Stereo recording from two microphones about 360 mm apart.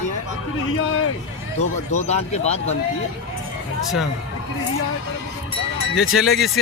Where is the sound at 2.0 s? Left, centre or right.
Centre.